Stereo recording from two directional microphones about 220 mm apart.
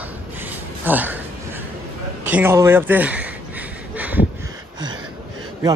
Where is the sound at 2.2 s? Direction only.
10° right (ahead or behind).